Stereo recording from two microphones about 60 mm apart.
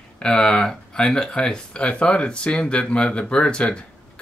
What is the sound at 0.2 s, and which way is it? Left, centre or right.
Speech, centre.